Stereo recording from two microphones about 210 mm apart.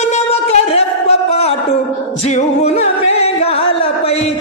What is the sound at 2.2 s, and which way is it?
Music, 30° left (ahead or behind).